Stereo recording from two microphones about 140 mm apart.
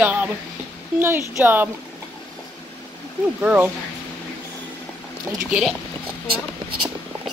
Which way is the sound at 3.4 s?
10° right (ahead or behind).